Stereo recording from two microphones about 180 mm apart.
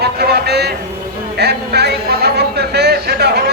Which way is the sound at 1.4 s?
65° right (ahead or behind).